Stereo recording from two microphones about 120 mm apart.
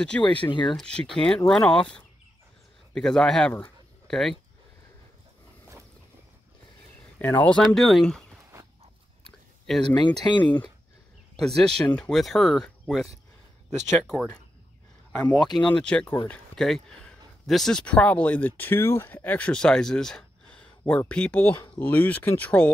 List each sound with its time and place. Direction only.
0.1 s speech: 15° left (ahead or behind)
0.5 s speech: 40° left (ahead or behind)
0.7 s speech: 5° left (ahead or behind)
7.2 s speech: 15° left (ahead or behind)
9.7 s speech: 5° left (ahead or behind)
10.2 s speech: 40° left (ahead or behind)
11.3 s speech: 5° left (ahead or behind)
15.1 s speech: 10° left (ahead or behind)